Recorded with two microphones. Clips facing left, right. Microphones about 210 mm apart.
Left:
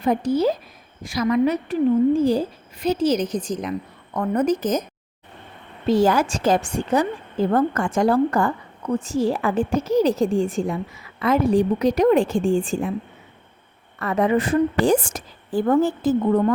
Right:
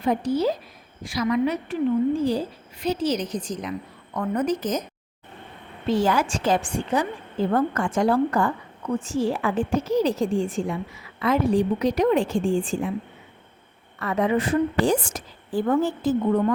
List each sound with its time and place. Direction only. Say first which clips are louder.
0.0 s a woman's voice: left 3 dB; 45° left (ahead or behind)
5.9 s a woman's voice: left 4 dB; 40° left (ahead or behind)
14.0 s a woman's voice: left 3 dB; 50° left (ahead or behind)